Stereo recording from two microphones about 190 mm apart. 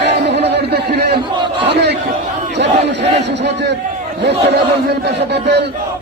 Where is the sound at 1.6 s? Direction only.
60° right (ahead or behind).